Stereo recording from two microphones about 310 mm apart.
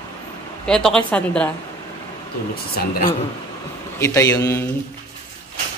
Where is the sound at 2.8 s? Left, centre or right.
Left.